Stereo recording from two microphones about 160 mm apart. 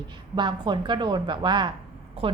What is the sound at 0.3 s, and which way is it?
A woman's voice, 30° right (ahead or behind).